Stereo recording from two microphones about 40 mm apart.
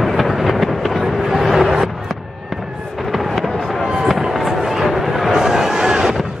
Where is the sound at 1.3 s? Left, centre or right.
Centre.